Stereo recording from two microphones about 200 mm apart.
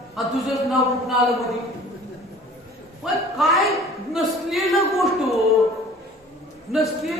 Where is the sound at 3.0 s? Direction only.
Centre (ahead or behind).